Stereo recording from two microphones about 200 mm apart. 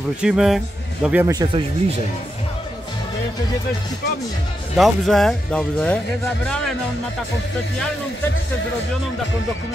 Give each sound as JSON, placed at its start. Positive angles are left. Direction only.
{"t": 0.2, "sound": "a man's voice", "side_deg": -5}
{"t": 1.3, "sound": "speech", "side_deg": -20}
{"t": 4.7, "sound": "speech", "side_deg": 0}